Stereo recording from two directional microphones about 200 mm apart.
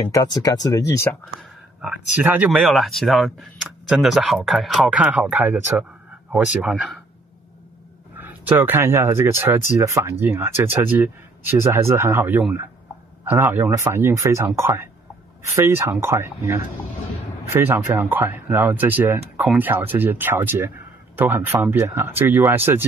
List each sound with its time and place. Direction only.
0.1 s speech: 15° left (ahead or behind)
1.8 s speech: 5° right (ahead or behind)
8.2 s speech: 10° right (ahead or behind)